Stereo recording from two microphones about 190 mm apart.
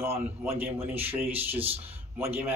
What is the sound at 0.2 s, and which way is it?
Speech, 10° right (ahead or behind).